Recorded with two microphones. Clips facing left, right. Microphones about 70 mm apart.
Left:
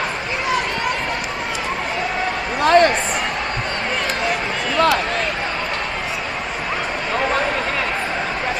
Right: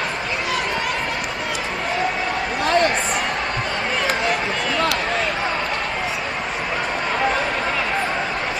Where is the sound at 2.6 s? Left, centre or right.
Left.